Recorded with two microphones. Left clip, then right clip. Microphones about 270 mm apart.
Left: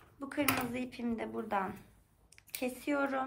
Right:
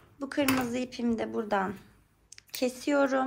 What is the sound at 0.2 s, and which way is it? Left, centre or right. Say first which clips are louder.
Speech: right 5 dB; centre.